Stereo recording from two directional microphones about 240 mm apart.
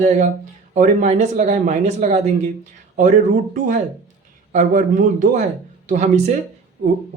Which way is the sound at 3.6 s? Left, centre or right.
Right.